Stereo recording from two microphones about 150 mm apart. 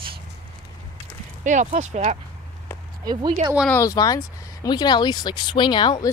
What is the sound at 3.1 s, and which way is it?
Speech, 30° right (ahead or behind).